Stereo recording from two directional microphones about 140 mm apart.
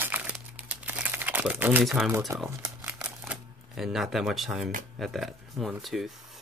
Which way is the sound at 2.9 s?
10° right (ahead or behind).